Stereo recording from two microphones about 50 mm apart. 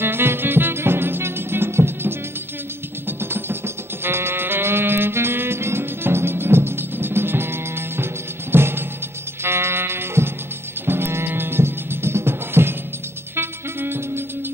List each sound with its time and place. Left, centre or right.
0.0 s music: right